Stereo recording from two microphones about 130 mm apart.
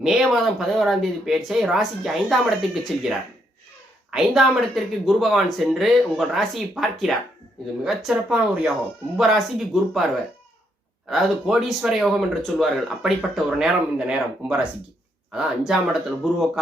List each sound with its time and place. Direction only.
0.0 s speech: centre (ahead or behind)
11.1 s speech: centre (ahead or behind)